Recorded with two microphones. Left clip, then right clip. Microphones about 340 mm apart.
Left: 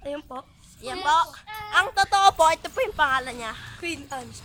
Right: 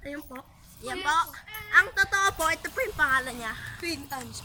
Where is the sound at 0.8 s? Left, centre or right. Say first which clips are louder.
Left 4 dB; centre.